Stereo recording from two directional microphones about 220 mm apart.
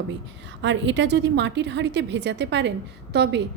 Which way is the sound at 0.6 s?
55° right (ahead or behind).